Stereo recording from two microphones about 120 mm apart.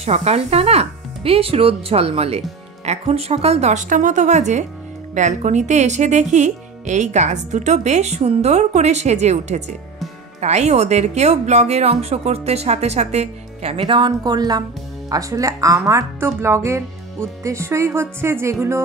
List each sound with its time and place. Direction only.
0.0 s speech: 65° right (ahead or behind)
13.9 s a woman's voice: 35° right (ahead or behind)